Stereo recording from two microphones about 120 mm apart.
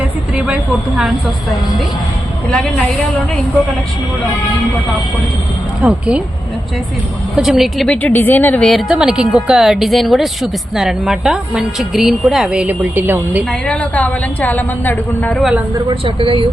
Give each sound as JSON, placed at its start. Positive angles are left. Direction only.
{"t": 0.0, "sound": "a woman's voice", "side_deg": -10}
{"t": 5.8, "sound": "speech", "side_deg": -5}
{"t": 7.3, "sound": "speech", "side_deg": 0}
{"t": 8.0, "sound": "a woman's voice", "side_deg": 15}
{"t": 8.7, "sound": "speech", "side_deg": -5}
{"t": 13.5, "sound": "a woman's voice", "side_deg": 10}
{"t": 15.4, "sound": "speech", "side_deg": -5}
{"t": 15.9, "sound": "speech", "side_deg": -45}